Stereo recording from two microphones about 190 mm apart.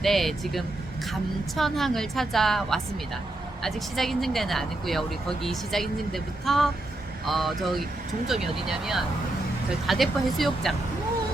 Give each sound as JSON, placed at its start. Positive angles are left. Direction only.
{"t": 0.0, "sound": "speech", "side_deg": 0}